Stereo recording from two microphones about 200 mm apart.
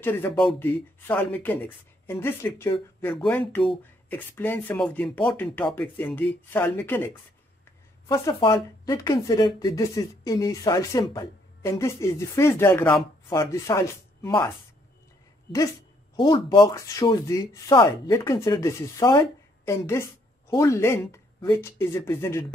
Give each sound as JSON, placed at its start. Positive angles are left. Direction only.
{"t": 0.0, "sound": "speech", "side_deg": 10}
{"t": 8.1, "sound": "speech", "side_deg": 20}
{"t": 16.2, "sound": "speech", "side_deg": 25}